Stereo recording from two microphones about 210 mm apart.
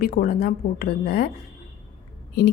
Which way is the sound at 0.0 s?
45° left (ahead or behind).